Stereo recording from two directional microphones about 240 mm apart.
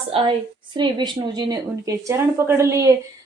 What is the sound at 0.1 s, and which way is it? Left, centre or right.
A woman's voice, right.